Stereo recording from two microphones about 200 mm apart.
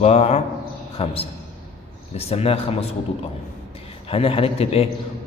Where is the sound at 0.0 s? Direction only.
35° left (ahead or behind).